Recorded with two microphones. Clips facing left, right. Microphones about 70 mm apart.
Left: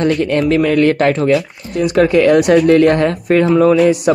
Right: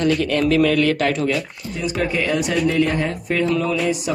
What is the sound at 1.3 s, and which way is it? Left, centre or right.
Speech, left.